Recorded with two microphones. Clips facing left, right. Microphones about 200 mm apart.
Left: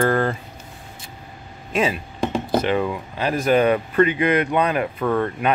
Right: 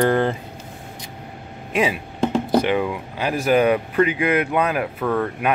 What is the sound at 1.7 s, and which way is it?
Speech, 10° right (ahead or behind).